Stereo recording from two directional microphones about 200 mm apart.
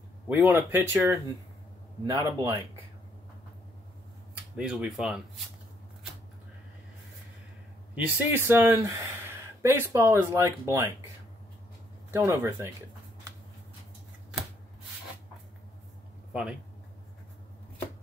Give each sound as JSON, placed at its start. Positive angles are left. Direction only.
{"t": 0.3, "sound": "speech", "side_deg": -10}
{"t": 4.6, "sound": "speech", "side_deg": -5}
{"t": 7.9, "sound": "speech", "side_deg": -10}
{"t": 12.1, "sound": "speech", "side_deg": -15}